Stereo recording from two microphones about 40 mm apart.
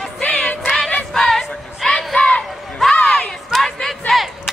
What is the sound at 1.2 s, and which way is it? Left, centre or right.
Music, centre.